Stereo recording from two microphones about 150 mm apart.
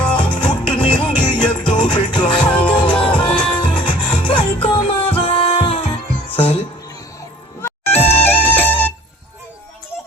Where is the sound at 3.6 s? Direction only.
35° left (ahead or behind).